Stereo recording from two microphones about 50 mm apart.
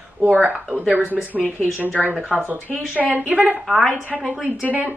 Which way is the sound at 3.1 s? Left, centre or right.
Right.